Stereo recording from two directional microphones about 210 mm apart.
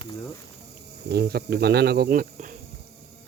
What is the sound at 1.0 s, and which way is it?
Speech, 50° right (ahead or behind).